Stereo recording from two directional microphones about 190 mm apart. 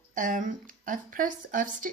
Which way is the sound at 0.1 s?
45° right (ahead or behind).